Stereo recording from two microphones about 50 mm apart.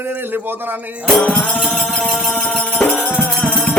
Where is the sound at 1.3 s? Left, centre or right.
Left.